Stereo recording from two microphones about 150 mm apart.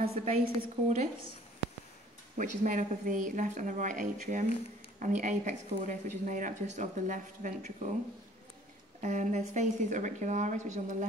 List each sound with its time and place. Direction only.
0.0 s speech: 45° right (ahead or behind)
2.3 s speech: 55° right (ahead or behind)
9.0 s speech: 50° right (ahead or behind)